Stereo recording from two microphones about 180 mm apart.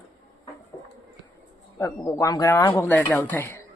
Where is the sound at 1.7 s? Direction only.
15° left (ahead or behind).